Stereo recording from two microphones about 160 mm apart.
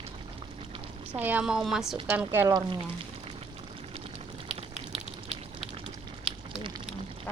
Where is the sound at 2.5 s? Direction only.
30° right (ahead or behind).